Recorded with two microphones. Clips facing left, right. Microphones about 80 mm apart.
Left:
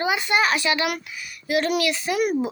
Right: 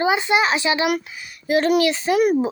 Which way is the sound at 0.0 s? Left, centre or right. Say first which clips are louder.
Right 3 dB; right.